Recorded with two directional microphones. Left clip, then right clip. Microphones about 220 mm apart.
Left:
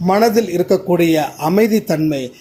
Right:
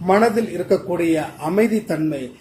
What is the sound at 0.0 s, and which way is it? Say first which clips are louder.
A man's voice: left 3 dB; 40° left (ahead or behind).